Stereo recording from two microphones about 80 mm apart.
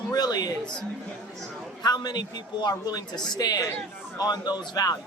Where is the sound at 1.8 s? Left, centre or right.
Left.